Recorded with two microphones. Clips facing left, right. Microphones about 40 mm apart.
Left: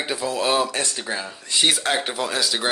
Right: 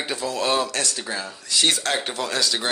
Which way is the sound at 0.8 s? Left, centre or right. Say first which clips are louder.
Left 1 dB; left.